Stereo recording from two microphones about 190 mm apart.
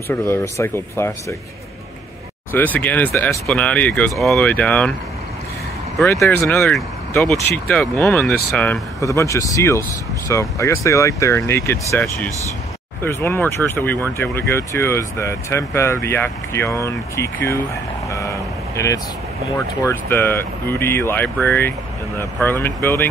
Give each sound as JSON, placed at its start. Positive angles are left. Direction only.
{"t": 0.1, "sound": "speech", "side_deg": 15}
{"t": 2.5, "sound": "speech", "side_deg": 10}
{"t": 6.7, "sound": "speech", "side_deg": 5}
{"t": 18.0, "sound": "vehicle", "side_deg": 15}
{"t": 19.8, "sound": "speech", "side_deg": 15}